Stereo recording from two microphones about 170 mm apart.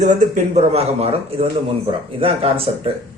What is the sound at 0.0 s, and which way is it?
A man's voice, 45° right (ahead or behind).